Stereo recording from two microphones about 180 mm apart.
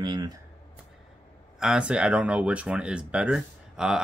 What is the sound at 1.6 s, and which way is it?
Speech, 5° right (ahead or behind).